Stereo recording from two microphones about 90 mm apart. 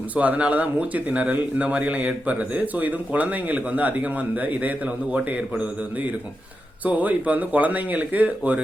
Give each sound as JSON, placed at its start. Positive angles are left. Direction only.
{"t": 0.2, "sound": "speech", "side_deg": -15}